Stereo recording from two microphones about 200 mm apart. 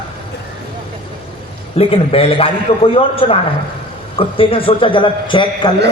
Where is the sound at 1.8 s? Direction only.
30° left (ahead or behind).